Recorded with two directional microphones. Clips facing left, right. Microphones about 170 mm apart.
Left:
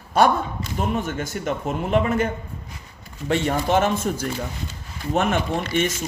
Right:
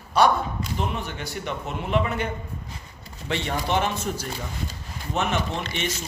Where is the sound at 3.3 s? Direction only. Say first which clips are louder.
Left 5 dB; 45° left (ahead or behind).